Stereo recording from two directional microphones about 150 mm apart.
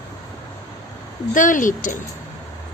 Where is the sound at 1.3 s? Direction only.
60° left (ahead or behind).